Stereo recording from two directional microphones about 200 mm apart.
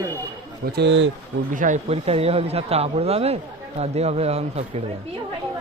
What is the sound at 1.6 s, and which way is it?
Speech, 35° right (ahead or behind).